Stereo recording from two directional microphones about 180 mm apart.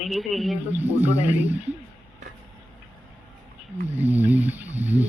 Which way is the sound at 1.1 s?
40° left (ahead or behind).